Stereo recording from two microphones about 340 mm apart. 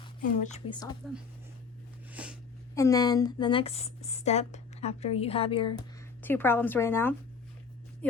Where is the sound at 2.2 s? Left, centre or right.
Centre.